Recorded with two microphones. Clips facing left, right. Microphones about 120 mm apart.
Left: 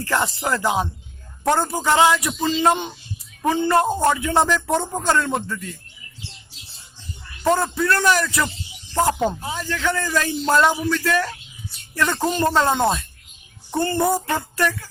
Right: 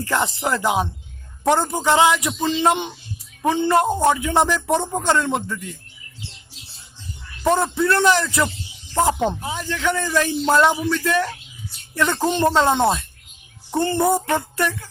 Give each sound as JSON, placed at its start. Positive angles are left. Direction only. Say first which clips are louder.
{"t": 0.0, "sound": "music", "louder": "right 1 dB", "side_deg": -20}
{"t": 1.5, "sound": "speech", "louder": "right 1 dB", "side_deg": -15}
{"t": 7.4, "sound": "music", "louder": "right 1 dB", "side_deg": -20}
{"t": 9.4, "sound": "speech", "louder": "right 1 dB", "side_deg": -15}
{"t": 11.9, "sound": "music", "louder": "right 1 dB", "side_deg": -20}